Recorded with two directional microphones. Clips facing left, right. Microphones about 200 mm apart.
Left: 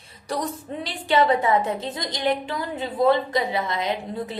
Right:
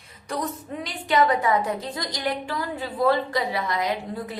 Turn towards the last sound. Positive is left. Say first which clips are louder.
# left 1 dB
turn(degrees=25)  # may be behind; listen again after turning